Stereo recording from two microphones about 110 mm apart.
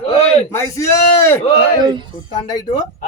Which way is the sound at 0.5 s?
25° left (ahead or behind).